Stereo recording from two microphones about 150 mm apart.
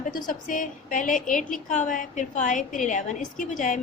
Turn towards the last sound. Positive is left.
turn(degrees=60)  # may be behind; listen again after turning